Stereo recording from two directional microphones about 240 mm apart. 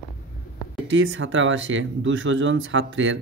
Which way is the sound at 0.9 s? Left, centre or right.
Right.